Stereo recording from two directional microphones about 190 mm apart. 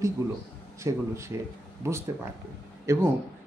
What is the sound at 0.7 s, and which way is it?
A man's voice, 15° right (ahead or behind).